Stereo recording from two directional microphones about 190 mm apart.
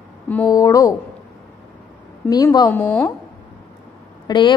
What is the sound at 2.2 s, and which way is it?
Speech, 20° left (ahead or behind).